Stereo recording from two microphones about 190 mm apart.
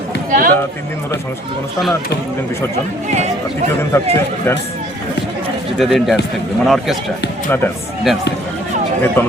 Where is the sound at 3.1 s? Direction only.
40° right (ahead or behind).